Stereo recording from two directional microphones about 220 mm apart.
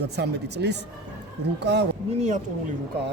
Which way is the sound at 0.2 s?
50° right (ahead or behind).